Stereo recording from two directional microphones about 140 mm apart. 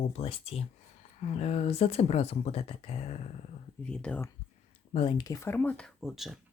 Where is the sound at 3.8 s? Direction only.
10° left (ahead or behind).